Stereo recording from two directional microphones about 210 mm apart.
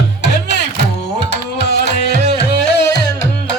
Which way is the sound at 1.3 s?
55° left (ahead or behind).